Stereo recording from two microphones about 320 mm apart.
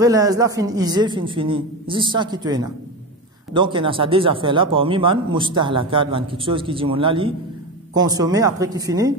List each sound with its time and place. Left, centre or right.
0.0 s speech: centre